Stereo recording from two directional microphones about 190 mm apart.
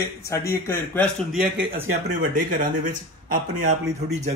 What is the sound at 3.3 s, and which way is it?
Speech, 40° right (ahead or behind).